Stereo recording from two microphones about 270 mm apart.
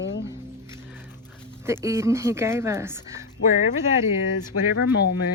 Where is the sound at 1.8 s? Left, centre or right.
Centre.